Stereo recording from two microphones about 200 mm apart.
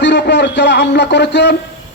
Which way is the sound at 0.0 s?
60° left (ahead or behind).